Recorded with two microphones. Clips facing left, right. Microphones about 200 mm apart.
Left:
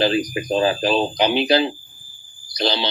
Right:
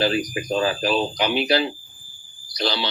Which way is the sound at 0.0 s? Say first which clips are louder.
Left 3 dB; 25° left (ahead or behind).